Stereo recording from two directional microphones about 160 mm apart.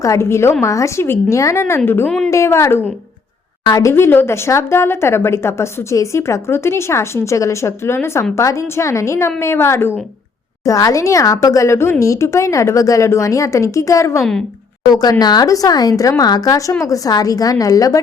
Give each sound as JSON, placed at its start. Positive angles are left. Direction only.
{"t": 0.0, "sound": "speech", "side_deg": 15}
{"t": 2.0, "sound": "a woman's voice", "side_deg": 5}
{"t": 2.3, "sound": "speech", "side_deg": 15}